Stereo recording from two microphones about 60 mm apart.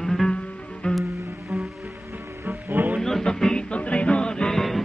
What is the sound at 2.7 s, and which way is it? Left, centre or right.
Music, right.